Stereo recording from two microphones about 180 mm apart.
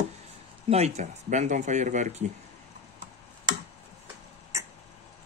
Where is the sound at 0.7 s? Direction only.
35° right (ahead or behind).